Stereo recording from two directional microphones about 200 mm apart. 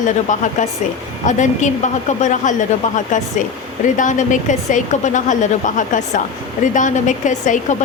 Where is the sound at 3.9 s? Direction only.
40° left (ahead or behind).